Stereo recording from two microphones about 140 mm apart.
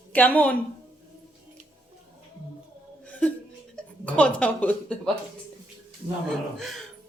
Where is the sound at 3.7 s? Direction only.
10° left (ahead or behind).